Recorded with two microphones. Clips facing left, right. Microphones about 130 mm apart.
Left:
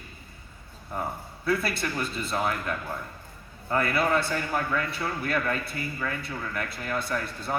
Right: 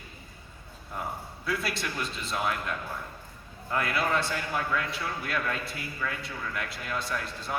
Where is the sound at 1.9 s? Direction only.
35° left (ahead or behind).